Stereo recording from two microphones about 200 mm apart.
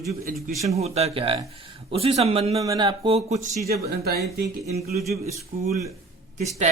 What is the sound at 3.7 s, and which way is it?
Speech, 50° right (ahead or behind).